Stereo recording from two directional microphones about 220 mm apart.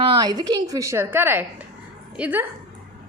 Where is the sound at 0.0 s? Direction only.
20° right (ahead or behind).